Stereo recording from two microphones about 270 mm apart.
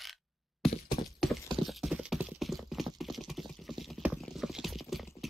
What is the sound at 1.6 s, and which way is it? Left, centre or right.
Clip-clop, centre.